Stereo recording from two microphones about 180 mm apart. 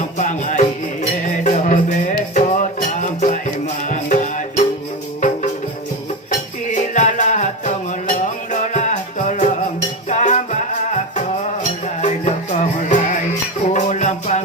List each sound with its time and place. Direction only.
0.2 s music: 45° left (ahead or behind)
6.7 s music: 45° left (ahead or behind)